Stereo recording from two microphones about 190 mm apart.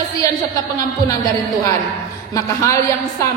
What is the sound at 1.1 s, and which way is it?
Speech, 15° left (ahead or behind).